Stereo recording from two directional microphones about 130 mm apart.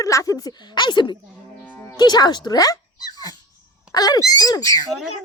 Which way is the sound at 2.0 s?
30° left (ahead or behind).